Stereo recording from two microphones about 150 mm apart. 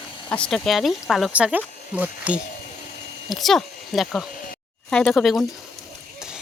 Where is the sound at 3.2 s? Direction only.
Centre (ahead or behind).